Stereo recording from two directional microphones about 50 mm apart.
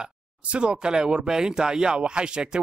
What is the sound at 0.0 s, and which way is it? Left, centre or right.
Speech, right.